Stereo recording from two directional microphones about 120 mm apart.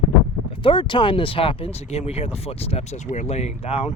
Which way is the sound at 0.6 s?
45° left (ahead or behind).